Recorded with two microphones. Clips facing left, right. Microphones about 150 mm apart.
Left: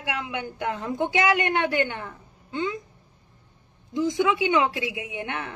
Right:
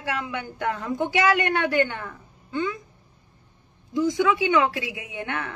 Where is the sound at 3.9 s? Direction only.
20° left (ahead or behind).